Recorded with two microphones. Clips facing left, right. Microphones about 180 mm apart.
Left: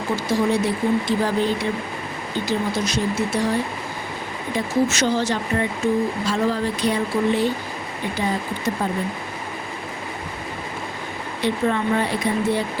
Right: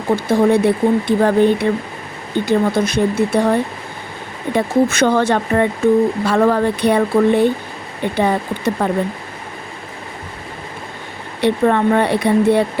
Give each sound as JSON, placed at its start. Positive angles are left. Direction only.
{"t": 0.3, "sound": "speech", "side_deg": -55}
{"t": 11.3, "sound": "speech", "side_deg": -65}